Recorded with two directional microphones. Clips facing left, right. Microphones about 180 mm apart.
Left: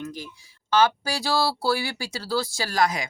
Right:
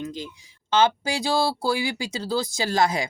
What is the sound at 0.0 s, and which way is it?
Speech, 20° right (ahead or behind).